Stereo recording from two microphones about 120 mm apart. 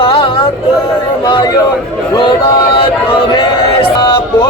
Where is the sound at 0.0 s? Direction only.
45° left (ahead or behind).